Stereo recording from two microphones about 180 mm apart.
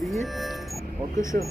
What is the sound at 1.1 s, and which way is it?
Speech, 15° left (ahead or behind).